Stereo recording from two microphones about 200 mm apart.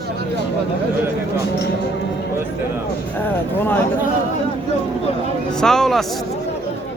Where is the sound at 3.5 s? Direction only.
10° left (ahead or behind).